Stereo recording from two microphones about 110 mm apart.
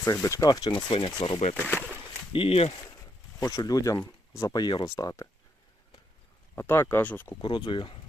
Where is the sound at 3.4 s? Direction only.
35° left (ahead or behind).